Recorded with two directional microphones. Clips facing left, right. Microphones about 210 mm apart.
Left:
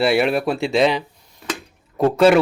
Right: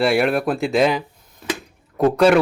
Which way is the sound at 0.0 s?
Centre (ahead or behind).